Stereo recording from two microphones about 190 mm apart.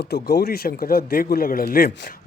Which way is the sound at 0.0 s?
55° left (ahead or behind).